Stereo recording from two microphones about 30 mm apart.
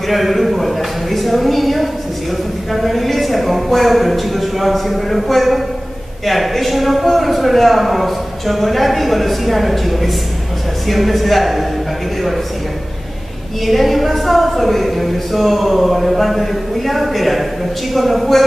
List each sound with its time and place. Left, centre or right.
0.1 s a sound: centre
2.7 s a man's voice: centre
13.7 s a man's voice: centre